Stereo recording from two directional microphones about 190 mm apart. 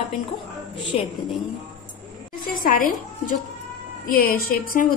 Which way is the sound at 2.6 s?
45° left (ahead or behind).